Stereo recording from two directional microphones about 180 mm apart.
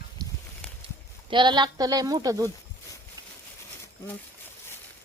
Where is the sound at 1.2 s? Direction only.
25° right (ahead or behind).